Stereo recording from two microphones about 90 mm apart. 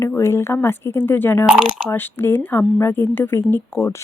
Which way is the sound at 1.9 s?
25° left (ahead or behind).